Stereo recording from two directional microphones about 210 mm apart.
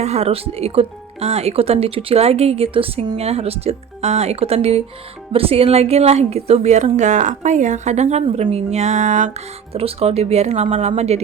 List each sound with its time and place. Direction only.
0.0 s a woman's voice: 30° right (ahead or behind)